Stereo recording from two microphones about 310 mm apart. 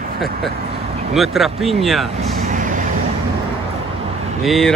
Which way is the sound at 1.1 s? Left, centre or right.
Centre.